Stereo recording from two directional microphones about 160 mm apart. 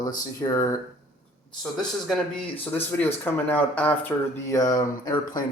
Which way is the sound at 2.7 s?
15° left (ahead or behind).